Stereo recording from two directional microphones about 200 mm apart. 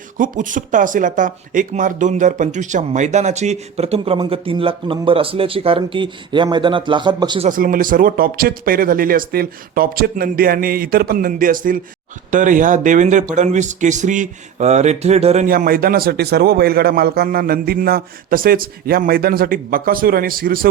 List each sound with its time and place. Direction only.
0.2 s speech: 40° right (ahead or behind); by 7.4 s 20° right (ahead or behind)
7.4 s a man's voice: 45° right (ahead or behind)
15.4 s a man's voice: 45° right (ahead or behind)